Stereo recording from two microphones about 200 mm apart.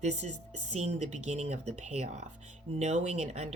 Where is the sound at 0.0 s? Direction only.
35° right (ahead or behind).